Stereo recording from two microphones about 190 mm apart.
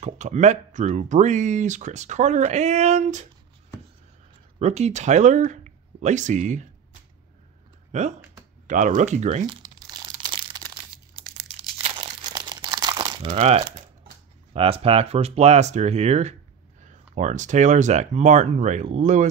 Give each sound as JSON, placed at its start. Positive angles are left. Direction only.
{"t": 0.0, "sound": "speech", "side_deg": -40}
{"t": 4.6, "sound": "speech", "side_deg": -35}
{"t": 7.9, "sound": "speech", "side_deg": -35}
{"t": 9.5, "sound": "crumpling", "side_deg": -20}
{"t": 11.8, "sound": "crumpling", "side_deg": -30}
{"t": 13.3, "sound": "speech", "side_deg": -35}